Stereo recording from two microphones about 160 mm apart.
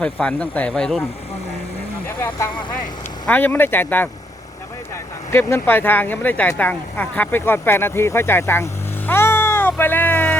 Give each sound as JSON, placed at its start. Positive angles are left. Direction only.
{"t": 0.0, "sound": "speech", "side_deg": 5}
{"t": 2.0, "sound": "vehicle", "side_deg": 15}
{"t": 3.2, "sound": "speech", "side_deg": 10}
{"t": 5.3, "sound": "speech", "side_deg": 15}